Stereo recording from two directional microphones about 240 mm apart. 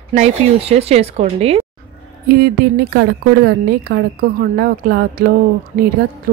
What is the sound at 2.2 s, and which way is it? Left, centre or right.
A woman's voice, right.